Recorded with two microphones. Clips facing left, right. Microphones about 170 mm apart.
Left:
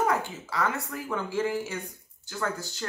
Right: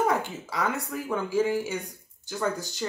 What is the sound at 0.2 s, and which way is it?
Speech, 15° right (ahead or behind).